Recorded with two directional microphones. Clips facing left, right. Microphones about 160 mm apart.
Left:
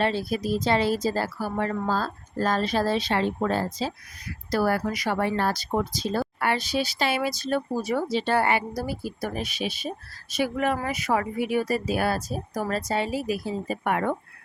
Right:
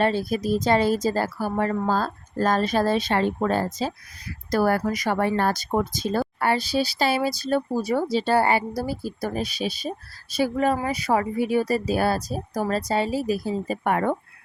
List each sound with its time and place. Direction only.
0.0 s a woman's voice: 45° right (ahead or behind)